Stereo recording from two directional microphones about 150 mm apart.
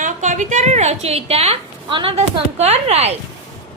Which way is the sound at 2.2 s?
45° right (ahead or behind).